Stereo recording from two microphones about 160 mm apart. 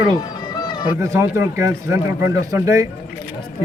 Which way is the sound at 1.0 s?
20° right (ahead or behind).